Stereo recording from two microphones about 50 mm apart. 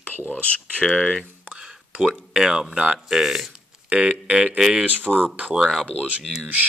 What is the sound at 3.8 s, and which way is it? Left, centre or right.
Speech, right.